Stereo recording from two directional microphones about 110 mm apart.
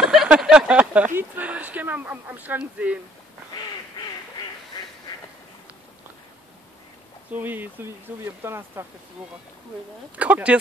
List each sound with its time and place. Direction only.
0.0 s speech: 5° right (ahead or behind)
7.3 s speech: 15° right (ahead or behind)
10.1 s speech: 15° right (ahead or behind)